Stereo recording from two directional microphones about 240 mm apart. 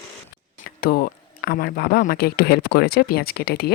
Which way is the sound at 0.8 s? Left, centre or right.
Left.